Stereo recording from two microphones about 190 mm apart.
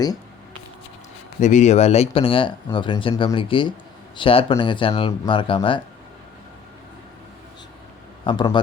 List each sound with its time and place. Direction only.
1.4 s speech: 40° left (ahead or behind)
8.2 s speech: 25° left (ahead or behind)